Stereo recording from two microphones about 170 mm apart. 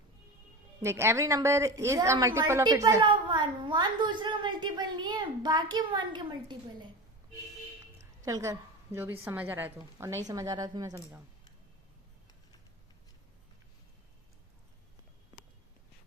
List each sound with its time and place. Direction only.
0.8 s a woman's voice: 15° right (ahead or behind)
8.2 s a woman's voice: 20° right (ahead or behind)